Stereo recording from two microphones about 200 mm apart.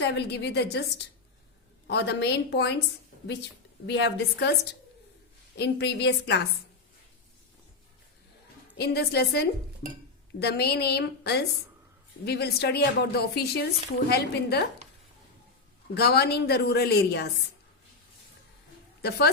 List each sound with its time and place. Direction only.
0.1 s a woman's voice: 60° left (ahead or behind)
3.8 s a woman's voice: 60° left (ahead or behind)
5.5 s a woman's voice: 60° left (ahead or behind)
8.8 s a woman's voice: 55° left (ahead or behind)
16.0 s a woman's voice: 55° left (ahead or behind)
19.0 s a woman's voice: 55° left (ahead or behind)